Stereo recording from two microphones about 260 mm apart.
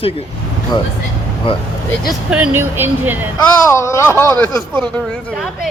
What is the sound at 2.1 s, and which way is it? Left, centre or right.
Speech, centre.